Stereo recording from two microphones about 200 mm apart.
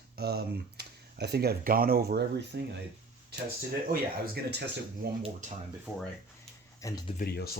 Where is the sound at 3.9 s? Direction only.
50° right (ahead or behind).